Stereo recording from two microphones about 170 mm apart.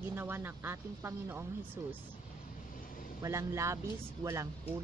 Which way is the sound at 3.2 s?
15° right (ahead or behind).